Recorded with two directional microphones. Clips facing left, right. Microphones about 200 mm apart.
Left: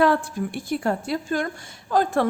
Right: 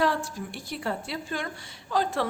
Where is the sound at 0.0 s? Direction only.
55° left (ahead or behind).